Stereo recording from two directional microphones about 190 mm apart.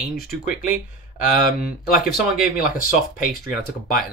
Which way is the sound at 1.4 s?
50° left (ahead or behind).